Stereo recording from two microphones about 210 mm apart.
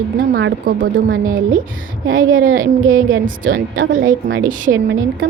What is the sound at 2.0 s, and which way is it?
Speech, 70° right (ahead or behind).